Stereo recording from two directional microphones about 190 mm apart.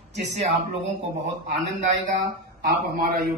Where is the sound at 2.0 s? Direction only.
50° right (ahead or behind).